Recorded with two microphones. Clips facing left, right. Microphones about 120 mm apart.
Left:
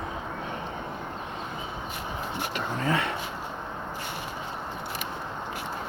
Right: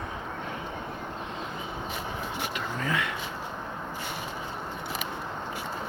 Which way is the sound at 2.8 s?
35° left (ahead or behind).